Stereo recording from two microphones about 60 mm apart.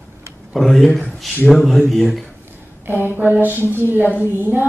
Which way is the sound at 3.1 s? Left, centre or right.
Right.